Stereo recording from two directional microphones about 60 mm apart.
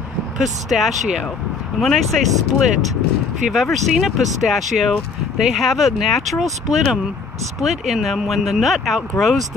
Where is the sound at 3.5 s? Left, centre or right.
Centre.